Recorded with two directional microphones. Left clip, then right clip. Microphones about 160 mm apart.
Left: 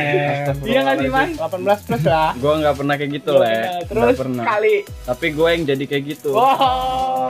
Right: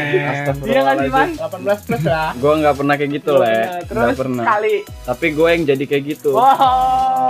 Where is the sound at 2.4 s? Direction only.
20° right (ahead or behind).